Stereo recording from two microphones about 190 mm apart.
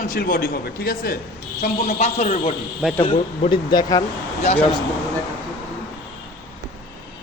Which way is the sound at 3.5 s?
25° left (ahead or behind).